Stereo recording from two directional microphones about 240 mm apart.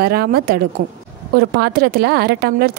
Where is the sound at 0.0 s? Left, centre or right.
Right.